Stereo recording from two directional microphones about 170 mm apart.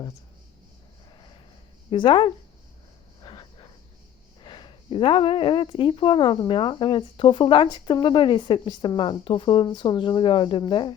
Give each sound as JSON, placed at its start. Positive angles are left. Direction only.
{"t": 1.9, "sound": "speech", "side_deg": 30}
{"t": 3.2, "sound": "a sound", "side_deg": 25}
{"t": 4.4, "sound": "speech", "side_deg": 25}